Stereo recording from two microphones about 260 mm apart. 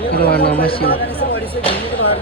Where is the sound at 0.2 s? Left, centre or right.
Left.